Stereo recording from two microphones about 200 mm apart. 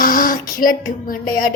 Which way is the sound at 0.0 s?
45° left (ahead or behind).